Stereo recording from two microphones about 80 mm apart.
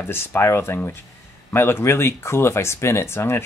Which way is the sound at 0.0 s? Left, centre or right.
Left.